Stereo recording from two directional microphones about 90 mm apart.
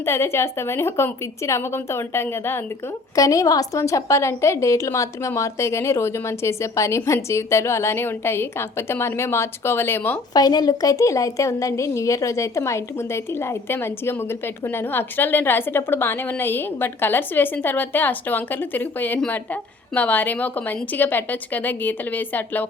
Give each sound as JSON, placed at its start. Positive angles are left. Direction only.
{"t": 0.0, "sound": "a woman's voice", "side_deg": 30}
{"t": 3.2, "sound": "a woman's voice", "side_deg": 40}
{"t": 10.3, "sound": "a woman's voice", "side_deg": 50}